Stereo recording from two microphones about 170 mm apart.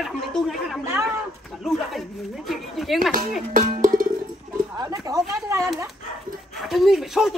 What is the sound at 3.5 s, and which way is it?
Music, 55° right (ahead or behind).